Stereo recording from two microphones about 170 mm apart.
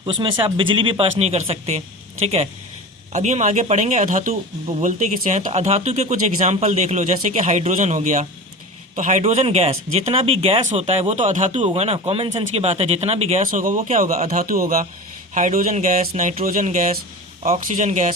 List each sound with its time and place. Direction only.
0.0 s speech: 30° right (ahead or behind); by 18.1 s 45° right (ahead or behind)